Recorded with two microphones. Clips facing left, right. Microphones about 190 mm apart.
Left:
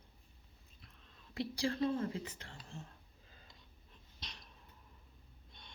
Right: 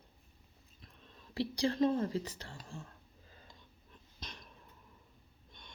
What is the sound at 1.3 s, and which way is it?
Speech, 35° right (ahead or behind).